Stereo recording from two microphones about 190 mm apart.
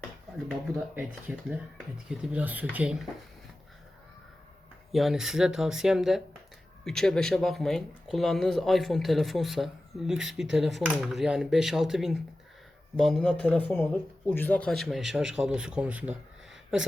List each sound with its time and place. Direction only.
0.9 s speech: 5° right (ahead or behind)
4.9 s speech: centre (ahead or behind)